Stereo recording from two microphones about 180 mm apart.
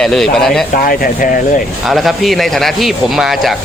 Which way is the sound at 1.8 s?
Centre (ahead or behind).